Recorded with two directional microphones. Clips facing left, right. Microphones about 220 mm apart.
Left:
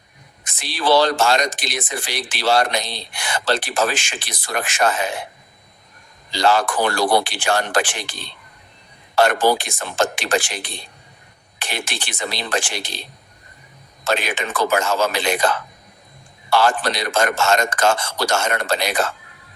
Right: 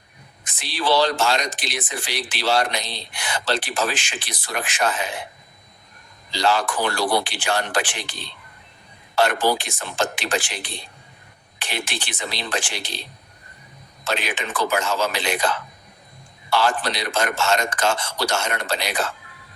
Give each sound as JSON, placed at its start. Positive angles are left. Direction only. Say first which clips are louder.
{"t": 0.6, "sound": "a man's voice", "louder": "left 3 dB", "side_deg": 45}
{"t": 6.3, "sound": "a man's voice", "louder": "left 3 dB", "side_deg": 45}
{"t": 11.6, "sound": "a man's voice", "louder": "left 1 dB", "side_deg": 45}
{"t": 14.0, "sound": "a man's voice", "louder": "left 4 dB", "side_deg": 45}